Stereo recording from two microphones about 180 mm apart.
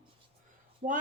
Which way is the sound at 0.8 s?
35° right (ahead or behind).